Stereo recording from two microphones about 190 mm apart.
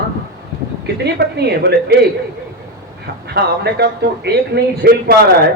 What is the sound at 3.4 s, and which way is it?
A man's voice, 60° right (ahead or behind).